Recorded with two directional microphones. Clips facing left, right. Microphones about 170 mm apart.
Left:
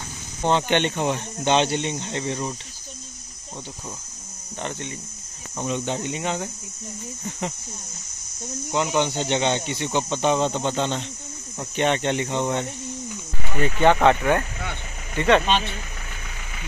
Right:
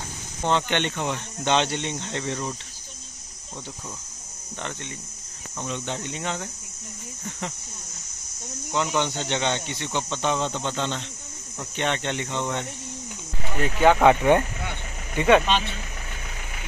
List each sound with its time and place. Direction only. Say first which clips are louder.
0.4 s speech: left 3 dB; 15° left (ahead or behind)
5.6 s speech: left 5 dB; 15° left (ahead or behind)
8.7 s speech: left 3 dB; 15° left (ahead or behind)
13.6 s speech: even; 5° right (ahead or behind)
15.1 s speech: right 1 dB; 10° right (ahead or behind)